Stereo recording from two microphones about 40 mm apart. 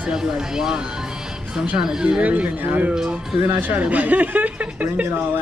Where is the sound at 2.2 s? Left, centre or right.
Right.